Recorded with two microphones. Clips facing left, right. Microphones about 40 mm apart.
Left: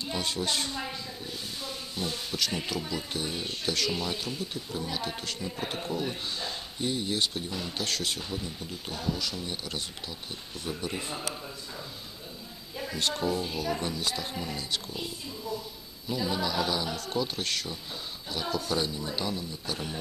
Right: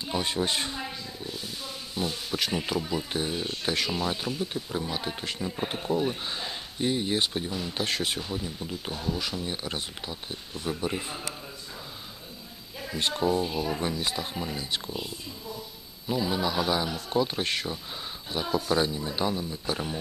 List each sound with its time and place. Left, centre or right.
0.0 s speech: centre
0.7 s a sound: centre
2.5 s speech: centre
9.2 s speech: centre
13.1 s speech: centre
16.1 s speech: centre